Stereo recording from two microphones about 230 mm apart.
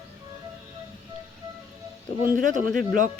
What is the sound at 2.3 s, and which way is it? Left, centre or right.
Speech, right.